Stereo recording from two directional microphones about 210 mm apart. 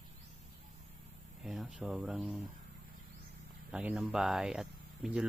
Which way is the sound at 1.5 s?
5° right (ahead or behind).